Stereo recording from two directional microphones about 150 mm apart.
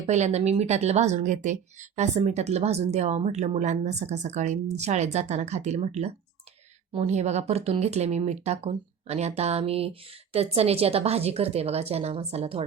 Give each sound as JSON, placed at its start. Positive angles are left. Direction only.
{"t": 0.1, "sound": "a woman's voice", "side_deg": -50}